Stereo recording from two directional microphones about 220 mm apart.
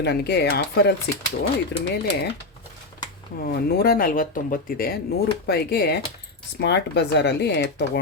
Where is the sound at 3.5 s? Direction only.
45° left (ahead or behind).